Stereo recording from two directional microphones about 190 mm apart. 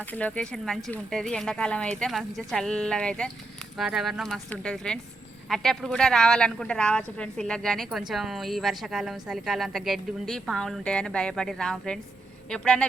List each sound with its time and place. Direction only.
0.1 s a woman's voice: 5° left (ahead or behind)